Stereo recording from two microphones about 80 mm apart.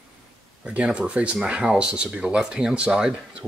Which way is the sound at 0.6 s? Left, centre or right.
Centre.